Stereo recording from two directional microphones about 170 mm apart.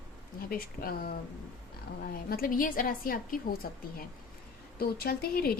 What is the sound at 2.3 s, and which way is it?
A woman's voice, 60° left (ahead or behind).